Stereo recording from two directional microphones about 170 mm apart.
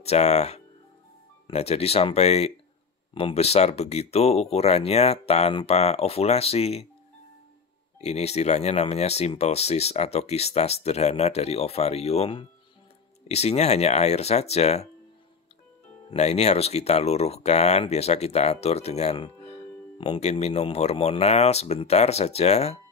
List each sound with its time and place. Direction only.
0.0 s speech: 40° left (ahead or behind)
8.0 s speech: 40° left (ahead or behind)
16.1 s speech: 40° left (ahead or behind)